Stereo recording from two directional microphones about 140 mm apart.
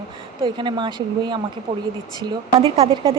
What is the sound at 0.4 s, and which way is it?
Speech, 35° right (ahead or behind).